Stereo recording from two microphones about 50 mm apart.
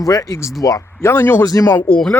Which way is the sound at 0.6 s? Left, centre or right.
Left.